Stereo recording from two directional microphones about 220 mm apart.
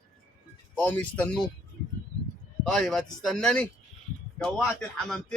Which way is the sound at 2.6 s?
5° left (ahead or behind).